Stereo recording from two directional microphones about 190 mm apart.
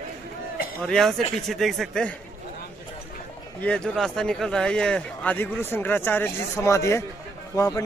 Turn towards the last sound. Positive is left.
turn(degrees=15)  # may be behind; listen again after turning